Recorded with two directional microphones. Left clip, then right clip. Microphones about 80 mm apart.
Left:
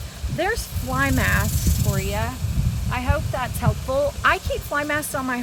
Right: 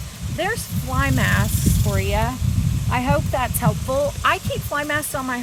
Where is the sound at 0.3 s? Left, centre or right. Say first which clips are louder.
Even; left.